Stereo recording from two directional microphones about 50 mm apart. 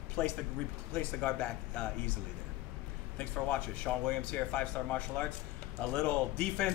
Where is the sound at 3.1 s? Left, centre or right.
Left.